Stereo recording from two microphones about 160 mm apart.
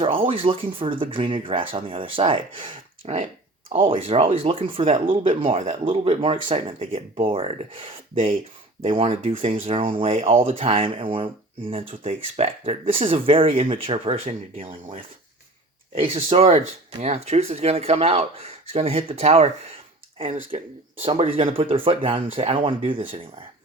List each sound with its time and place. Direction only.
0.0 s speech: 35° right (ahead or behind)
21.0 s speech: 35° right (ahead or behind)